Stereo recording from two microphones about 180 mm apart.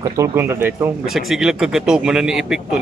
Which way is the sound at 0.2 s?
10° right (ahead or behind).